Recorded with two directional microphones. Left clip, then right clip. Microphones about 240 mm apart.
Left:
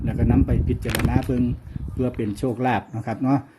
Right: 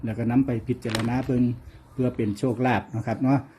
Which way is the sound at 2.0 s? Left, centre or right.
Centre.